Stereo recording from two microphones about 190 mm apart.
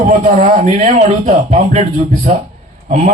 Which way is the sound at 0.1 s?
40° right (ahead or behind).